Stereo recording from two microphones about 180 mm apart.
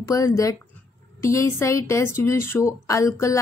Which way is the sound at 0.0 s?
20° left (ahead or behind).